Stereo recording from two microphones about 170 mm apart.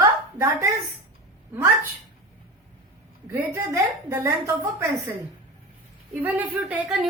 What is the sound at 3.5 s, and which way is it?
A woman's voice, 15° right (ahead or behind).